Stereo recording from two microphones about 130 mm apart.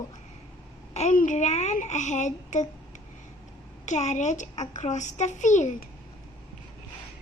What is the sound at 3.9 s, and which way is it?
A child's voice, 65° left (ahead or behind).